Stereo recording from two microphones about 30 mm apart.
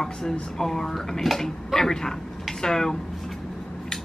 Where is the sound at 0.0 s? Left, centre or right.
Centre.